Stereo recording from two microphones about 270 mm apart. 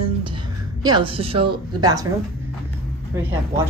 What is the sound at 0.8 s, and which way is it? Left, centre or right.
A woman's voice, centre.